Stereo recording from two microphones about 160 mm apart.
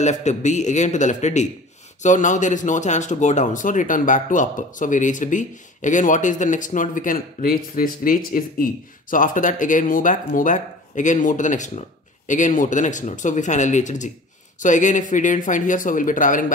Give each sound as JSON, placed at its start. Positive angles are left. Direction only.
{"t": 0.0, "sound": "speech", "side_deg": 45}